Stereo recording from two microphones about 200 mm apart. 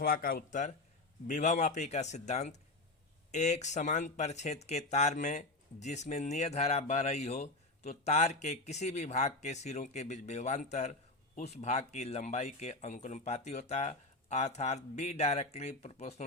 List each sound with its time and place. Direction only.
0.0 s speech: 45° left (ahead or behind)